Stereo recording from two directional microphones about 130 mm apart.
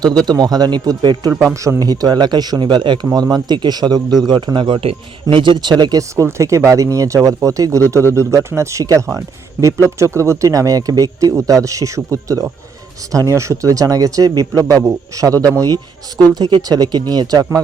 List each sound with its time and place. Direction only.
0.3 s speech: 30° right (ahead or behind)